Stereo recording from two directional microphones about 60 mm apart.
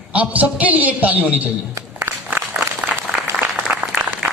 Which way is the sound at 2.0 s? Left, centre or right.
Right.